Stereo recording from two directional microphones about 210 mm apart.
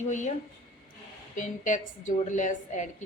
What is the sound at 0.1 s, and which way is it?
Speech, 35° left (ahead or behind).